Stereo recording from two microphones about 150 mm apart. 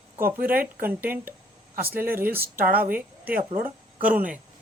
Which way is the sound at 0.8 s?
10° right (ahead or behind).